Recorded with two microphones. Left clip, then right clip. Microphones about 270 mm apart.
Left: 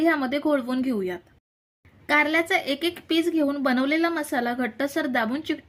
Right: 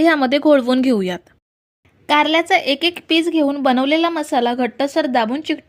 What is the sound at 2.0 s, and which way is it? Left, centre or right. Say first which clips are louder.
A woman's voice: right 6 dB; centre.